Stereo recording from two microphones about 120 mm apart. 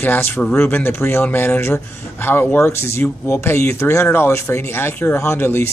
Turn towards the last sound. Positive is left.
turn(degrees=20)  # may be behind; listen again after turning